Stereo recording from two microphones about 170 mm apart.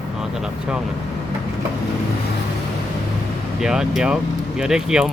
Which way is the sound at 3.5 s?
5° right (ahead or behind).